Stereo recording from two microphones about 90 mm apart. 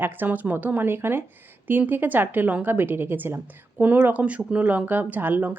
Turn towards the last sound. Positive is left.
turn(degrees=-20)  # may be behind; listen again after turning